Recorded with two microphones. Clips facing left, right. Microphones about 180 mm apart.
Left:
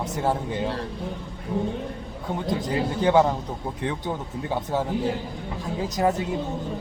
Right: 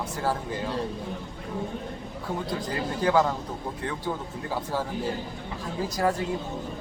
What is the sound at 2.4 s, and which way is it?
Speech, 20° left (ahead or behind).